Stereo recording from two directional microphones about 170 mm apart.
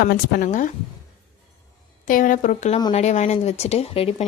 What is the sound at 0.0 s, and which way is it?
Speech, 60° left (ahead or behind).